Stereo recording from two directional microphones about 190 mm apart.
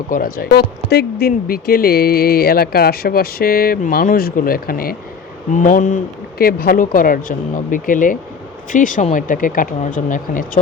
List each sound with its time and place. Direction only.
0.1 s speech: 50° left (ahead or behind)